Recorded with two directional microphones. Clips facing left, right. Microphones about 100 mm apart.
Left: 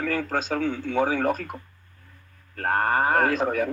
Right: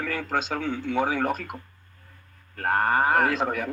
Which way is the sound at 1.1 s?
40° left (ahead or behind).